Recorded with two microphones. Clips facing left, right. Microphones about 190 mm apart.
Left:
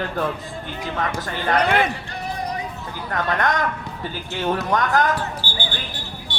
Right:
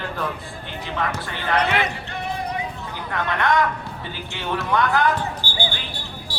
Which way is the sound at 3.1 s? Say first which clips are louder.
Even; 40° left (ahead or behind).